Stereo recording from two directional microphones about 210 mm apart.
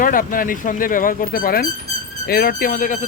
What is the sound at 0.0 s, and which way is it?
Speech, 40° left (ahead or behind).